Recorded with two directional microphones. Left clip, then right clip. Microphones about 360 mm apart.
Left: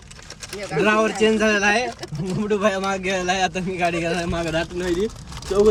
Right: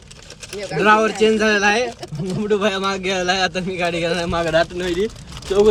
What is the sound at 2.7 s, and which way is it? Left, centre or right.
A man's voice, centre.